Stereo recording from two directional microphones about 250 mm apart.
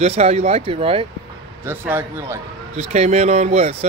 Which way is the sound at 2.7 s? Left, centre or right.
Right.